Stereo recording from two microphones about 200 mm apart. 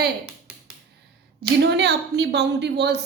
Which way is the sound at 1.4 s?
55° right (ahead or behind).